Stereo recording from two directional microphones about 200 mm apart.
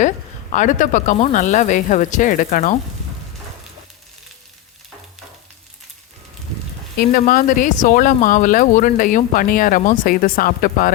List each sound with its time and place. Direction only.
0.5 s speech: 40° left (ahead or behind)
7.0 s speech: 45° left (ahead or behind)